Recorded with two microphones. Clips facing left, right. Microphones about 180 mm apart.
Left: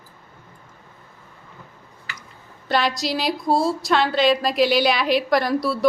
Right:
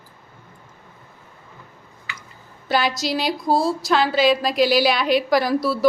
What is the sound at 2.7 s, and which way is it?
A woman's voice, centre (ahead or behind).